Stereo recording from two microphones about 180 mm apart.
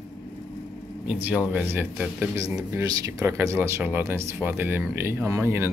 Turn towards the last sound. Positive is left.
turn(degrees=-15)  # may be behind; listen again after turning